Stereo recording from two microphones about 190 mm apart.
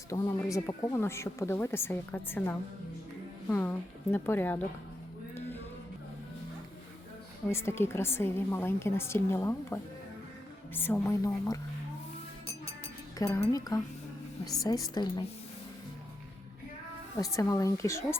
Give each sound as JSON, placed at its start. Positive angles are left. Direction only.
{"t": 0.1, "sound": "a woman's voice", "side_deg": 20}
{"t": 7.4, "sound": "a woman's voice", "side_deg": 15}
{"t": 13.1, "sound": "a woman's voice", "side_deg": 15}
{"t": 17.2, "sound": "a woman's voice", "side_deg": 15}